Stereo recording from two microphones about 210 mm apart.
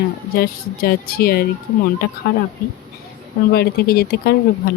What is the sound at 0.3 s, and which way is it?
Speech, 45° left (ahead or behind).